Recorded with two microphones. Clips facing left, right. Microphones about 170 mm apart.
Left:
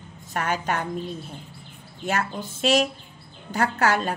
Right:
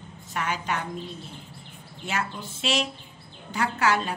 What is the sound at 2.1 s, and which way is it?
A woman's voice, 45° left (ahead or behind).